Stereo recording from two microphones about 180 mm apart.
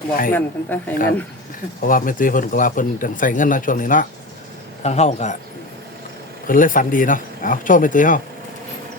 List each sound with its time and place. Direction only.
0.3 s speech: 10° left (ahead or behind)
1.8 s speech: 50° left (ahead or behind)
4.8 s a man's voice: 35° left (ahead or behind)
6.5 s speech: 50° left (ahead or behind)